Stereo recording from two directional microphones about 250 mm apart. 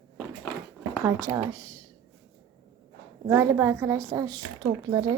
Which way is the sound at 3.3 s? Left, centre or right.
Centre.